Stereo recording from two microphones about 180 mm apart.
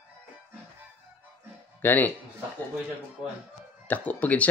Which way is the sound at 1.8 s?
10° left (ahead or behind).